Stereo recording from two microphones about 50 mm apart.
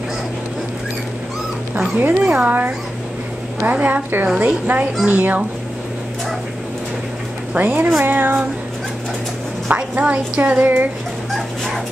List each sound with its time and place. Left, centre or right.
2.0 s speech: right
3.8 s speech: right
7.5 s speech: right
9.7 s speech: right
11.3 s dog: centre